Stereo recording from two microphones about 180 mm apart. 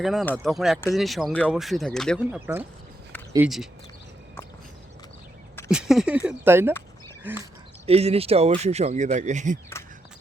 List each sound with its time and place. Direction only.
0.0 s speech: centre (ahead or behind)
5.7 s speech: 5° right (ahead or behind)
7.9 s speech: 35° right (ahead or behind)